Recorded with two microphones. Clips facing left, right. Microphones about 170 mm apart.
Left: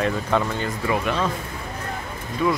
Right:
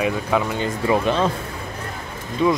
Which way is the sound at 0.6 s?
25° right (ahead or behind).